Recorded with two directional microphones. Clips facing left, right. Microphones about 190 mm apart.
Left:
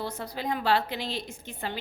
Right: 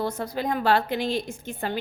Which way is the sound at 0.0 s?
50° right (ahead or behind).